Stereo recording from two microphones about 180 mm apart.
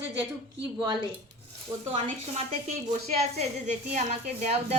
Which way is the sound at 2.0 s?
40° right (ahead or behind).